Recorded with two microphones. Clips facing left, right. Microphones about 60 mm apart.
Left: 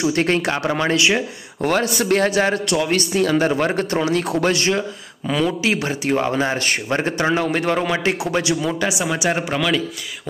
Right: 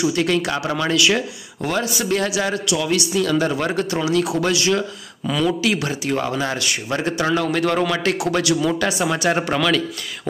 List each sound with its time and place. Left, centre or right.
0.1 s a man's voice: left
1.6 s a man's voice: left
8.5 s speech: centre